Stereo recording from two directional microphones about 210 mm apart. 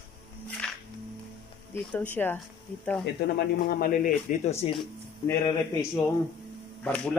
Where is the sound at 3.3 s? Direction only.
45° left (ahead or behind); by 4.7 s 30° left (ahead or behind).